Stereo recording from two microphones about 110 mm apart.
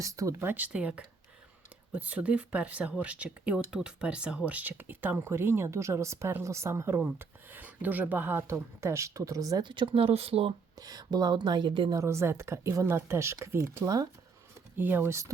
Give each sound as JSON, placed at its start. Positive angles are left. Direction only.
{"t": 0.0, "sound": "speech", "side_deg": -30}
{"t": 10.8, "sound": "speech", "side_deg": -35}
{"t": 11.9, "sound": "speech", "side_deg": -25}
{"t": 13.8, "sound": "speech", "side_deg": -35}
{"t": 14.8, "sound": "speech", "side_deg": -20}